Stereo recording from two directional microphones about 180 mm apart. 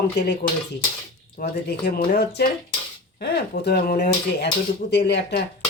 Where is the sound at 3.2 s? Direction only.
65° left (ahead or behind).